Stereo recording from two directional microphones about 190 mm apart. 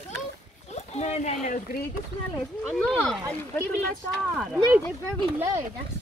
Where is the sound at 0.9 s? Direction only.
35° left (ahead or behind).